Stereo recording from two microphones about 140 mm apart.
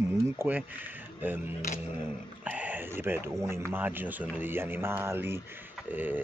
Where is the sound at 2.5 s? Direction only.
10° right (ahead or behind).